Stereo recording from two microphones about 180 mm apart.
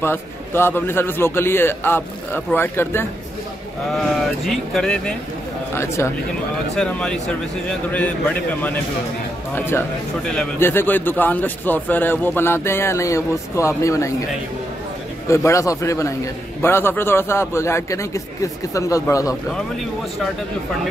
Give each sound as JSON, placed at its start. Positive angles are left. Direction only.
{"t": 0.0, "sound": "a man's voice", "side_deg": 10}
{"t": 3.9, "sound": "speech", "side_deg": 0}
{"t": 6.7, "sound": "a man's voice", "side_deg": 5}
{"t": 15.2, "sound": "a man's voice", "side_deg": 15}